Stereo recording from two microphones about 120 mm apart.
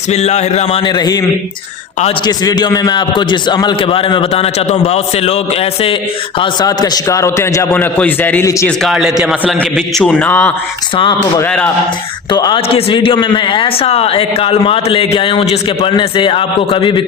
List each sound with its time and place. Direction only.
0.1 s a man's voice: 65° left (ahead or behind)
0.8 s a man's voice: 40° left (ahead or behind)
4.3 s a man's voice: 60° left (ahead or behind)
6.4 s a man's voice: 35° left (ahead or behind); by 8.4 s 15° left (ahead or behind)
8.8 s a man's voice: centre (ahead or behind)
12.3 s a man's voice: 40° left (ahead or behind)
12.6 s a man's voice: 50° left (ahead or behind)